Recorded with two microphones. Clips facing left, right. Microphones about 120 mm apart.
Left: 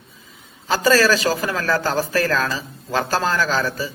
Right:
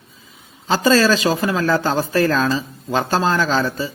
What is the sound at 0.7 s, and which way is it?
A man's voice, 25° right (ahead or behind).